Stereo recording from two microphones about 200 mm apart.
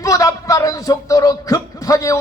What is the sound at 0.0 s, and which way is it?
Speech, 15° left (ahead or behind).